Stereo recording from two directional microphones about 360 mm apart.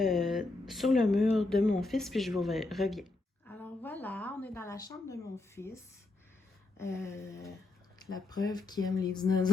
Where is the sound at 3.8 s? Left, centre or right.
Centre.